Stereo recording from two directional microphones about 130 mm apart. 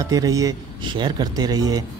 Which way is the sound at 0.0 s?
25° right (ahead or behind).